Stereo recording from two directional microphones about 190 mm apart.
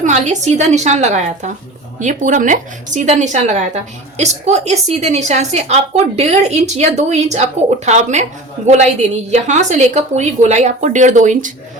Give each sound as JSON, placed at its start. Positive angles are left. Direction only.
{"t": 0.0, "sound": "a woman's voice", "side_deg": -35}